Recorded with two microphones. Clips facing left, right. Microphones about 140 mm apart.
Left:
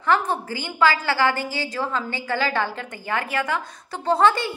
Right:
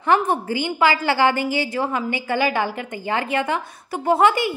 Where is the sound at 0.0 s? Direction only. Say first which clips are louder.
Right 3 dB; 20° right (ahead or behind).